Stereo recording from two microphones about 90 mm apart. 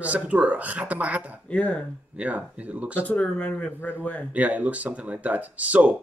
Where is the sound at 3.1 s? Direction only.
15° left (ahead or behind).